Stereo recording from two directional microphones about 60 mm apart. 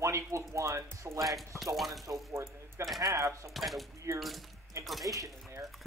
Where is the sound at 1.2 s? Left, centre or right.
Centre.